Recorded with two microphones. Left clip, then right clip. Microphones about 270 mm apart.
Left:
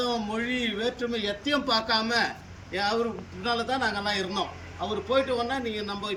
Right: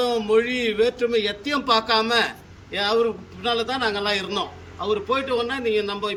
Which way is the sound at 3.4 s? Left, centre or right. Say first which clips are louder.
Right 4 dB; right.